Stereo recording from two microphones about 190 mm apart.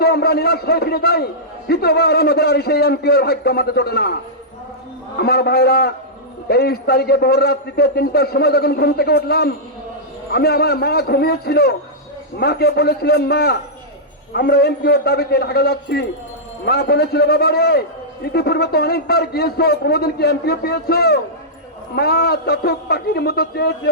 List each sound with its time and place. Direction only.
0.0 s a man's voice: 55° left (ahead or behind)
5.1 s a man's voice: 55° left (ahead or behind)